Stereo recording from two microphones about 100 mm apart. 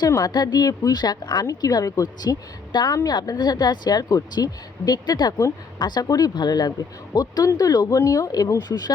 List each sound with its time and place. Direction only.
0.3 s speech: 45° left (ahead or behind)